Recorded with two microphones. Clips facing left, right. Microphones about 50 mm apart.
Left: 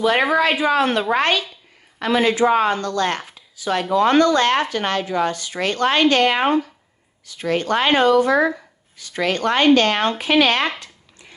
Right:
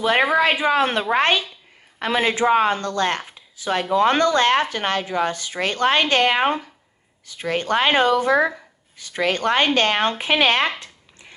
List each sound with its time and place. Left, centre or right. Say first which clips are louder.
0.4 s speech: left 1 dB; right